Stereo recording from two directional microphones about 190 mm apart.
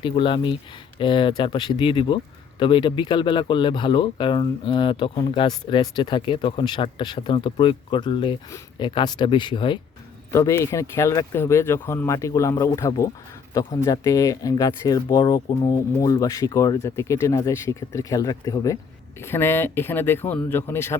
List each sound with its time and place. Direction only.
0.0 s speech: 25° left (ahead or behind)
10.3 s speech: 15° left (ahead or behind)